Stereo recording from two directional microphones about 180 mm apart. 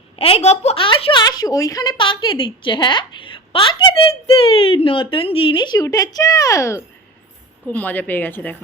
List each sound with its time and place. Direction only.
0.2 s speech: 35° left (ahead or behind); by 8.5 s 10° left (ahead or behind)